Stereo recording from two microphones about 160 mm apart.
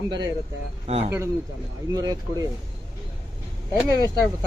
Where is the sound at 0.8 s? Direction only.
40° right (ahead or behind).